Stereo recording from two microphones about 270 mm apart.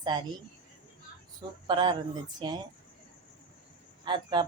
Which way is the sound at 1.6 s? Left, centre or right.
Centre.